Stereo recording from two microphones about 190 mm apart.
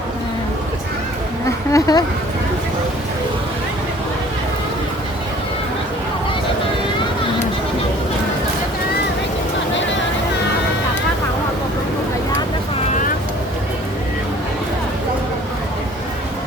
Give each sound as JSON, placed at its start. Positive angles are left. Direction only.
{"t": 1.7, "sound": "speech", "side_deg": 20}